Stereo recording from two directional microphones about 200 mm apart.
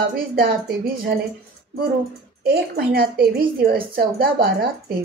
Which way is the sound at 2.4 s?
50° right (ahead or behind).